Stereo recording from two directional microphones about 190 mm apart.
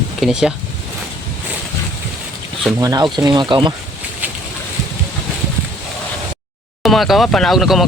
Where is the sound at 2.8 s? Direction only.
20° right (ahead or behind).